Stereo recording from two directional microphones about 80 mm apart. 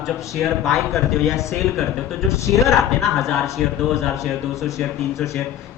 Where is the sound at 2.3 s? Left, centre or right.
Left.